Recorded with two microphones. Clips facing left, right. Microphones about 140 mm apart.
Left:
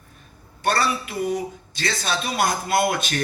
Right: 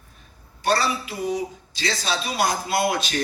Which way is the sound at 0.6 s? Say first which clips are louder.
Even; 55° left (ahead or behind).